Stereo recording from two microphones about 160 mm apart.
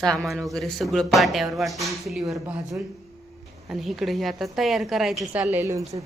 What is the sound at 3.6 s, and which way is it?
Speech, centre (ahead or behind).